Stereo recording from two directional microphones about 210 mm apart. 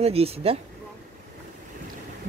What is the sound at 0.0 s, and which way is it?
Speech, 30° right (ahead or behind).